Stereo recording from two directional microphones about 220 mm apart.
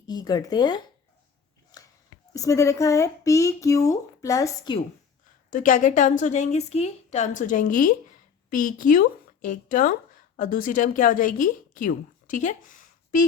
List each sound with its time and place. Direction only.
0.1 s speech: 20° left (ahead or behind)
2.3 s speech: 15° left (ahead or behind)
5.5 s a woman's voice: 35° left (ahead or behind)